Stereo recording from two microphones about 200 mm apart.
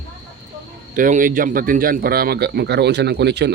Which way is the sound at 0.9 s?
40° right (ahead or behind).